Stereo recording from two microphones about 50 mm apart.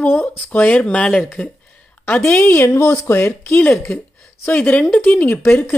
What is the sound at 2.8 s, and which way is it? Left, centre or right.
Speech, left.